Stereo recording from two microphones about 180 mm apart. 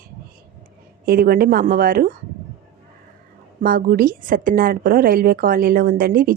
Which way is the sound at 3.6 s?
50° right (ahead or behind).